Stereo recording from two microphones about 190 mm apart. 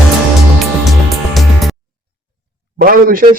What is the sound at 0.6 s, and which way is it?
Music, centre (ahead or behind).